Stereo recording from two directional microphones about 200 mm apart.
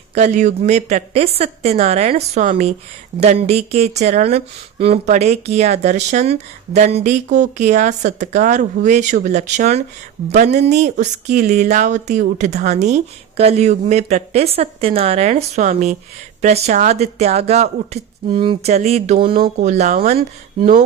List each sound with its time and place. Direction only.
0.1 s speech: 35° right (ahead or behind)